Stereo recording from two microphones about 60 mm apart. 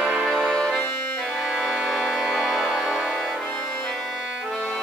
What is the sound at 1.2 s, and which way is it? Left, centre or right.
Organ, centre.